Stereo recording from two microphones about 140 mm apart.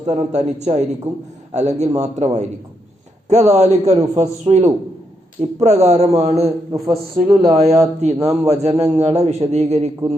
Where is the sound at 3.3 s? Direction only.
50° right (ahead or behind).